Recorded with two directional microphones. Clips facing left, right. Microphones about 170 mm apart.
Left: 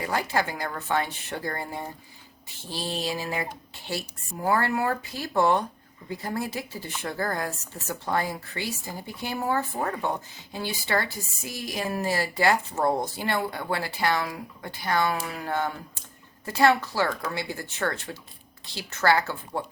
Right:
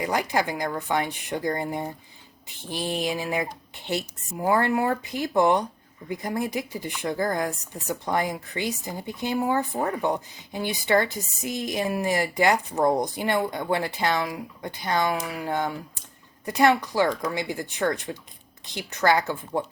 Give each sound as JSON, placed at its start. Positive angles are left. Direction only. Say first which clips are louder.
{"t": 0.0, "sound": "speech", "louder": "right 2 dB", "side_deg": -15}